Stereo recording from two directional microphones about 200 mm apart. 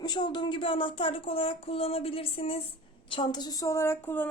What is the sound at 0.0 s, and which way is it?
A woman's voice, 20° left (ahead or behind).